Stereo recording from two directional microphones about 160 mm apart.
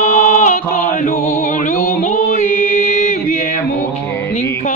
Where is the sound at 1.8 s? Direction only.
50° left (ahead or behind).